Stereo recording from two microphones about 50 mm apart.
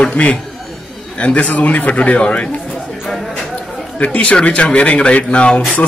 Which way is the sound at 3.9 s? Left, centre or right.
Left.